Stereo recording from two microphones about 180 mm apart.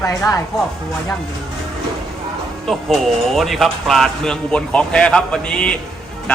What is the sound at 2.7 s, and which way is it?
Speech, centre (ahead or behind).